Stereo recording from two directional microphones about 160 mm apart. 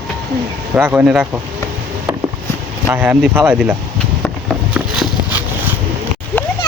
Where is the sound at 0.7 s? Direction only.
10° right (ahead or behind).